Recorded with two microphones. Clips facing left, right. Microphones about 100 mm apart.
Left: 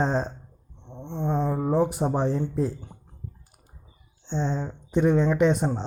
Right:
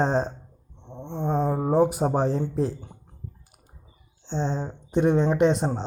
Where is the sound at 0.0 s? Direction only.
25° right (ahead or behind).